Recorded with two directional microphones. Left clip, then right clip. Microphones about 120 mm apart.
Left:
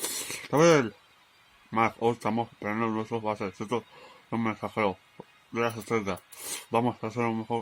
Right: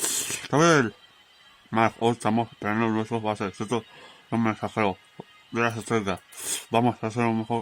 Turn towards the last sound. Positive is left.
turn(degrees=-60)  # may be behind; listen again after turning